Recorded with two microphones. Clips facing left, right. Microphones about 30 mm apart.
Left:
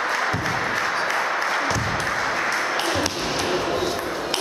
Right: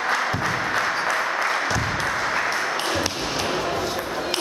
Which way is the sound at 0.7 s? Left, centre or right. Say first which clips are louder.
Even; centre.